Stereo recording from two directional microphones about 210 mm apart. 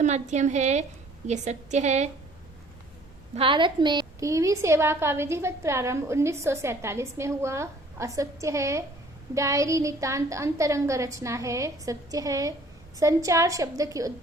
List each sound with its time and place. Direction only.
0.0 s a woman's voice: 35° right (ahead or behind)
3.3 s a woman's voice: 25° right (ahead or behind)